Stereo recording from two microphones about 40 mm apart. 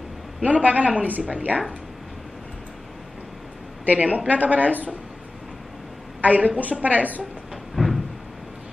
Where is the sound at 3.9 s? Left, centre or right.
Right.